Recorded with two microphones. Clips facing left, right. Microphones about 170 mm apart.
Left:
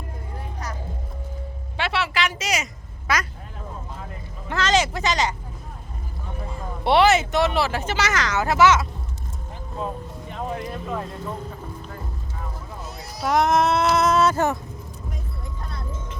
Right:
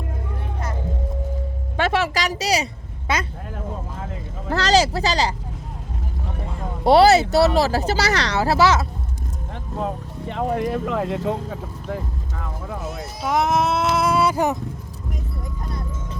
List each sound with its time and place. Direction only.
1.7 s speech: 45° right (ahead or behind); by 3.2 s 25° right (ahead or behind)
4.4 s speech: 35° right (ahead or behind)
6.8 s speech: 35° right (ahead or behind)
9.7 s speech: 80° right
13.2 s sheep: 5° right (ahead or behind)